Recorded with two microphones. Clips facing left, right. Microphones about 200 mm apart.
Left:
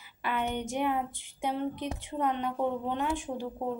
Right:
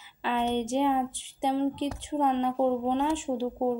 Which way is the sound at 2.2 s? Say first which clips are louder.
Right 5 dB; 20° right (ahead or behind).